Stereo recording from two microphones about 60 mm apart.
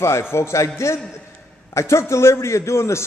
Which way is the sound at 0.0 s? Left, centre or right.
Left.